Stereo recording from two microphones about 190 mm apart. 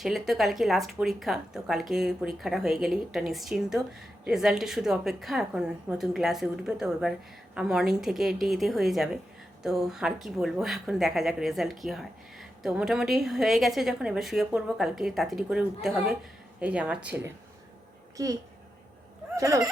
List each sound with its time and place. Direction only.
0.0 s speech: centre (ahead or behind)
19.4 s speech: 15° right (ahead or behind)